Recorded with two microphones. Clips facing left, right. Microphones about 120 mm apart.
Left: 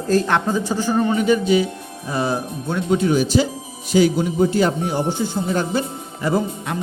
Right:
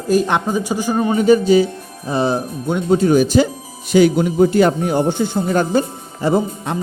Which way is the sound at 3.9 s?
65° right (ahead or behind).